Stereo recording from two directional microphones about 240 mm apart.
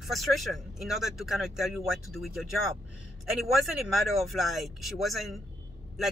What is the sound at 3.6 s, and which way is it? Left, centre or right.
Speech, centre.